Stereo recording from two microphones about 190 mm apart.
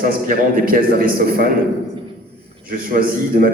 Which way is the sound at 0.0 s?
50° right (ahead or behind).